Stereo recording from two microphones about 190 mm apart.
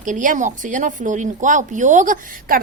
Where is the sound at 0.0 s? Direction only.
45° right (ahead or behind).